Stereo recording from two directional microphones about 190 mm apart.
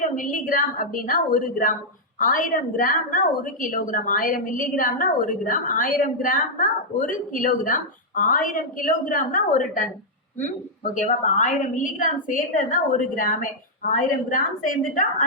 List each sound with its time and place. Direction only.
0.0 s a woman's voice: 45° left (ahead or behind)
10.9 s a woman's voice: 40° left (ahead or behind)